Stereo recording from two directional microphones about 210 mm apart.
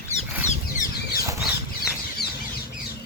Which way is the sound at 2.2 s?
50° left (ahead or behind).